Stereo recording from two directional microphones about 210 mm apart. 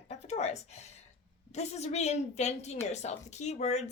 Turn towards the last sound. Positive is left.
turn(degrees=30)  # may be behind; listen again after turning